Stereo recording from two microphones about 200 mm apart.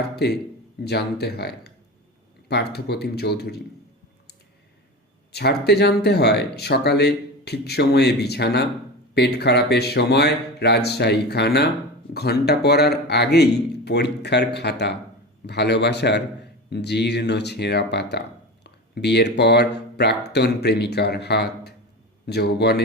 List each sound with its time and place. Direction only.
0.2 s speech: 55° left (ahead or behind)
5.3 s speech: 55° left (ahead or behind)